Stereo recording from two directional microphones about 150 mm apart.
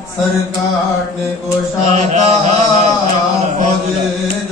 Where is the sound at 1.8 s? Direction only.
50° right (ahead or behind).